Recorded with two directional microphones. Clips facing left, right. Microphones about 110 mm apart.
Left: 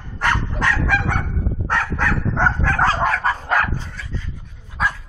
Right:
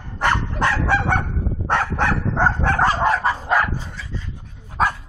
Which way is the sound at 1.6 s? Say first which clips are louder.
Right 2 dB; 25° right (ahead or behind).